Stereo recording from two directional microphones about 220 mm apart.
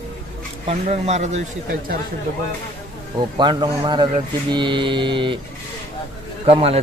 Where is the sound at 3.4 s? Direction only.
20° right (ahead or behind).